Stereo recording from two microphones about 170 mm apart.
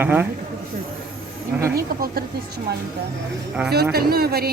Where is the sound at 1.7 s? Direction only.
60° right (ahead or behind).